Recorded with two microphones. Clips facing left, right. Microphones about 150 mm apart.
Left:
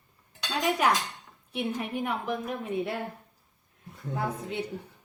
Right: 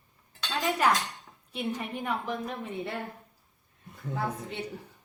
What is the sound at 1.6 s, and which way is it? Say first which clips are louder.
A woman's voice: left 3 dB; 10° left (ahead or behind).